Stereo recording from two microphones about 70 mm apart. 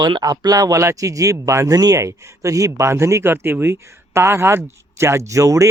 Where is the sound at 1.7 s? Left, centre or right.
Right.